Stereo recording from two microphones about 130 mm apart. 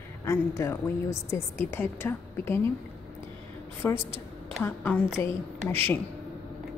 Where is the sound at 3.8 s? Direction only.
20° left (ahead or behind).